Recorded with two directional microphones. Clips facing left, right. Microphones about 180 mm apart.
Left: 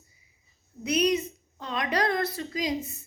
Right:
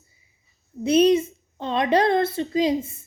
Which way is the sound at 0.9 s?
25° right (ahead or behind).